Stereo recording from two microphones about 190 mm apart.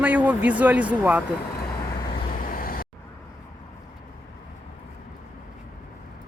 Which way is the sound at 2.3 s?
50° left (ahead or behind).